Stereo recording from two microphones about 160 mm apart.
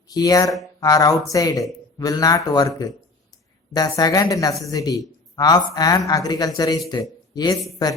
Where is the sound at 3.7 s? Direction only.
25° left (ahead or behind).